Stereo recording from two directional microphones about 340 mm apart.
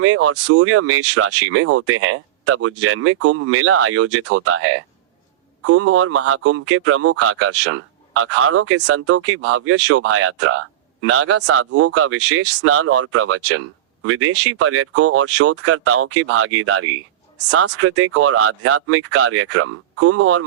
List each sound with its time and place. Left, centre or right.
0.0 s speech: right